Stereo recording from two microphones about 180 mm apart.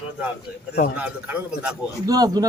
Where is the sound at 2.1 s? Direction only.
20° right (ahead or behind).